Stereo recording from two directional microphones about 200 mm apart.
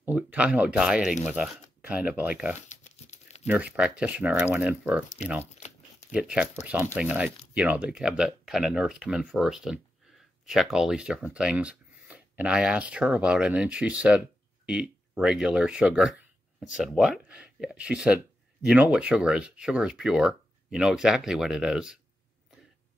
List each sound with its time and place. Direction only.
0.0 s speech: 5° right (ahead or behind)
2.7 s crumpling: 35° left (ahead or behind)
3.4 s speech: 5° right (ahead or behind)
6.1 s speech: 5° right (ahead or behind)